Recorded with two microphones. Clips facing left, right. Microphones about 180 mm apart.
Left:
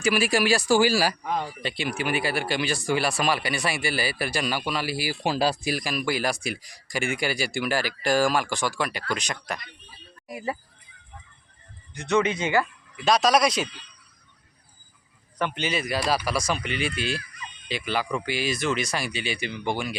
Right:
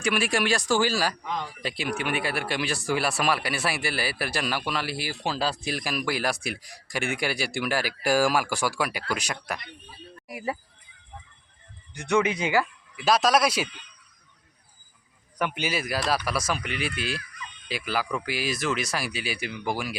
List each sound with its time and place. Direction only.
0.0 s speech: centre (ahead or behind)
1.2 s speech: 55° left (ahead or behind)
1.6 s speech: centre (ahead or behind)
11.9 s speech: 10° right (ahead or behind)
13.7 s speech: 35° left (ahead or behind)
15.4 s speech: 10° right (ahead or behind)